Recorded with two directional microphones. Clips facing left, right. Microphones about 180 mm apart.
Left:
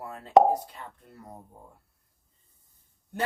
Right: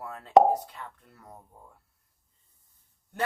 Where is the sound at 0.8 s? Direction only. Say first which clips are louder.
Right 1 dB; 30° left (ahead or behind).